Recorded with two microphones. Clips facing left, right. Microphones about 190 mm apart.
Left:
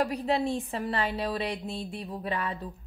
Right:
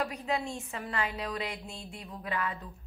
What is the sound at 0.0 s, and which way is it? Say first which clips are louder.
A woman's voice: left 6 dB; 35° left (ahead or behind).